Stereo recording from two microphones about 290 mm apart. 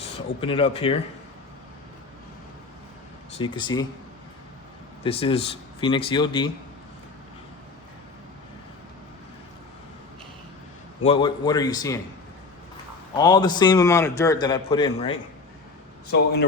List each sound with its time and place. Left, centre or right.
0.4 s speech: centre
3.3 s a man's voice: centre
5.0 s a man's voice: centre
11.0 s a man's voice: centre
13.1 s a man's voice: centre